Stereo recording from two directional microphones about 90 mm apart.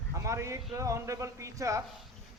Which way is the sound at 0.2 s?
35° right (ahead or behind).